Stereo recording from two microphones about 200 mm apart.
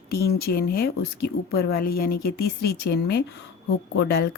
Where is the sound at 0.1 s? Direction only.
50° left (ahead or behind).